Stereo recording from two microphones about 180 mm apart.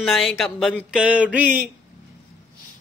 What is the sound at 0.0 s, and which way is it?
A woman's voice, centre (ahead or behind).